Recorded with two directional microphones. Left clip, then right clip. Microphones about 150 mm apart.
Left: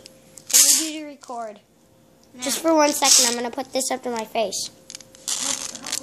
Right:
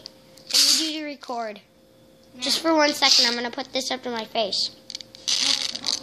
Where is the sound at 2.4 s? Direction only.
20° left (ahead or behind).